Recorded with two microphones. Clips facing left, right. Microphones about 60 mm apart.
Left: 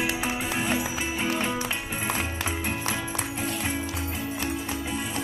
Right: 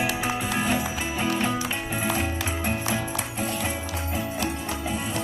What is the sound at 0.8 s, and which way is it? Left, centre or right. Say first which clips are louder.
Music: right 1 dB; centre.